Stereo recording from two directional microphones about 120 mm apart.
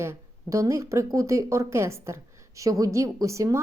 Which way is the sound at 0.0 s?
25° right (ahead or behind).